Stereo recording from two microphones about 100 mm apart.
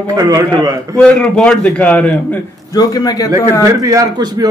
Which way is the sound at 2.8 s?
40° left (ahead or behind).